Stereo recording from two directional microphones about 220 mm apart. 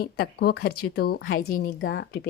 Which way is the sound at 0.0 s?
45° left (ahead or behind).